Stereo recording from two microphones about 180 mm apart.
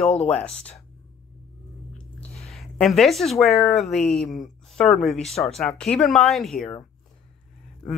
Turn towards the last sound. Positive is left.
turn(degrees=0)  # may be behind; listen again after turning